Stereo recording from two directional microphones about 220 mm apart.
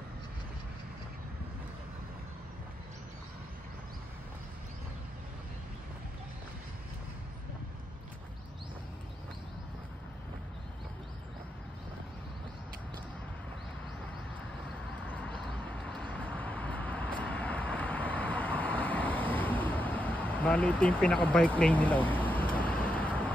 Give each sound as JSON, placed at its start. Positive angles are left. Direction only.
{"t": 15.1, "sound": "vehicle", "side_deg": 5}